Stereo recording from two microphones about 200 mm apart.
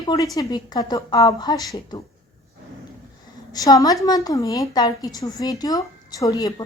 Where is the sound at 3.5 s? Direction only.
20° left (ahead or behind).